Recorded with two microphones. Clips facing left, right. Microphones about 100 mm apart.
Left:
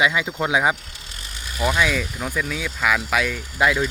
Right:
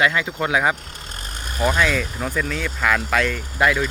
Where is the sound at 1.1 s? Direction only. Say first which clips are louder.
Right 3 dB; 45° right (ahead or behind).